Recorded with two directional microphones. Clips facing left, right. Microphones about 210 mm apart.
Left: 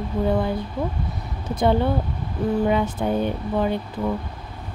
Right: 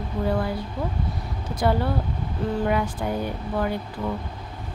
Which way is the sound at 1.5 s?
20° left (ahead or behind).